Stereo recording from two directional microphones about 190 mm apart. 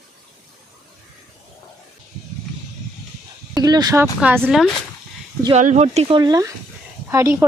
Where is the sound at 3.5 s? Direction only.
20° right (ahead or behind).